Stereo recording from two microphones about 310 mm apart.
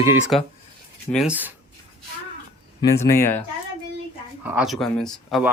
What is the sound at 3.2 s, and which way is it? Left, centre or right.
Speech, centre.